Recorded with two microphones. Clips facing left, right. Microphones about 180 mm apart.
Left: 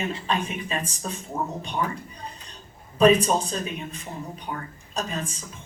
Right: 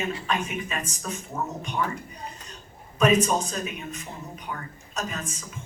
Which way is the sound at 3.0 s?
30° left (ahead or behind).